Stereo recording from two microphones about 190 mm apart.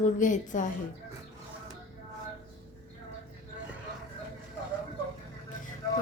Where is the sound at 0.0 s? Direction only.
40° left (ahead or behind).